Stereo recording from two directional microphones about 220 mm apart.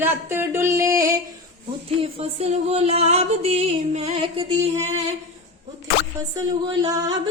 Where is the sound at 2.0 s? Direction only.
25° right (ahead or behind).